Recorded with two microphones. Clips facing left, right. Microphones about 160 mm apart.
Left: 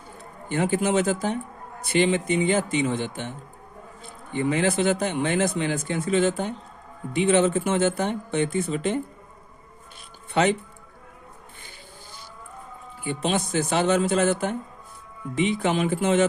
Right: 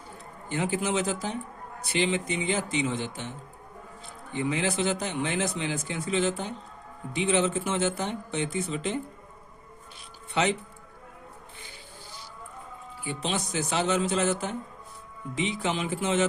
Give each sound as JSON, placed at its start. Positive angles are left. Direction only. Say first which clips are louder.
{"t": 0.4, "sound": "a man's voice", "louder": "left 5 dB", "side_deg": 55}
{"t": 13.1, "sound": "a man's voice", "louder": "left 6 dB", "side_deg": 55}